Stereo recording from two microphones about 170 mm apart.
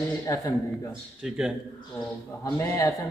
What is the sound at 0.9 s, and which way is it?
Speech, 5° right (ahead or behind).